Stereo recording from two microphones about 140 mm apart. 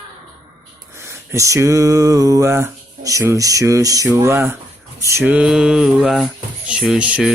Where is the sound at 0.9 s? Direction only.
20° right (ahead or behind).